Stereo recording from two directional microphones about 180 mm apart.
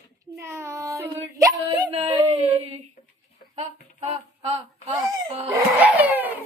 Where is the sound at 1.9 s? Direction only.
35° right (ahead or behind).